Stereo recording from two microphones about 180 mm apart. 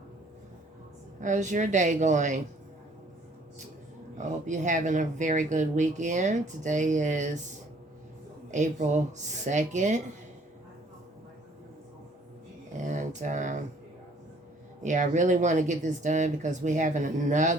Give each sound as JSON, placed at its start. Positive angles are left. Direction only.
{"t": 1.2, "sound": "speech", "side_deg": -45}
{"t": 4.2, "sound": "speech", "side_deg": -45}
{"t": 8.4, "sound": "speech", "side_deg": -40}
{"t": 12.8, "sound": "a sound", "side_deg": -45}
{"t": 14.8, "sound": "speech", "side_deg": -45}